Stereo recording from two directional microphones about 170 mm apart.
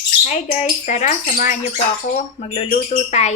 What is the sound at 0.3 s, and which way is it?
A woman's voice, 45° left (ahead or behind).